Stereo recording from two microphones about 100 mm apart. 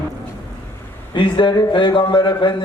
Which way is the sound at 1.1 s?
55° left (ahead or behind).